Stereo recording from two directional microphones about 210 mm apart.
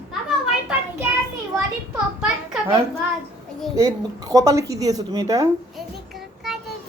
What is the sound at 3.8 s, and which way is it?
A woman's voice, 15° right (ahead or behind).